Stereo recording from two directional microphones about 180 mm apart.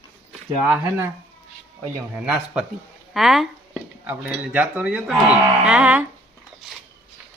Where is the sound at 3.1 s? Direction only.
Centre (ahead or behind).